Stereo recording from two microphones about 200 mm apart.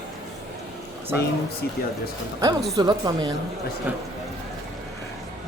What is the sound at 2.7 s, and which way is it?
Speech, 20° right (ahead or behind).